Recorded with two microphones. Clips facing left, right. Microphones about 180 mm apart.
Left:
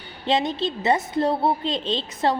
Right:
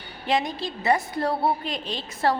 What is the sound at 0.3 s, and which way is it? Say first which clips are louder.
A woman's voice: left 3 dB; 25° left (ahead or behind).